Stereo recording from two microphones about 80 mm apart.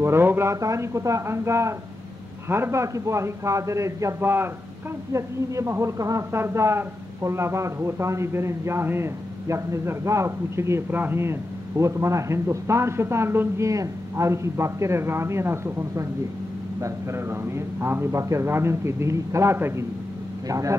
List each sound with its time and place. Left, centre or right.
0.0 s a woman's voice: right